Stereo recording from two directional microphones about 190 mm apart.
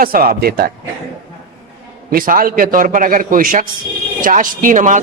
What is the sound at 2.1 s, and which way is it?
A man's voice, 50° right (ahead or behind).